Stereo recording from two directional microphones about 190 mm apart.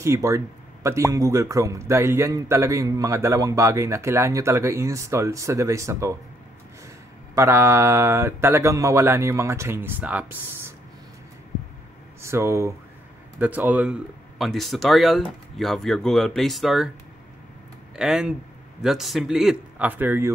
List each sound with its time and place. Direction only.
0.0 s a man's voice: 15° right (ahead or behind)
7.3 s a man's voice: 10° right (ahead or behind)
12.2 s speech: 15° right (ahead or behind)
17.9 s speech: 5° right (ahead or behind)